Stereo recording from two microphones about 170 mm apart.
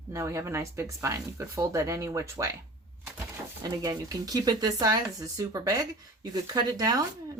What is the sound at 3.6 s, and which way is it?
Speech, 20° right (ahead or behind).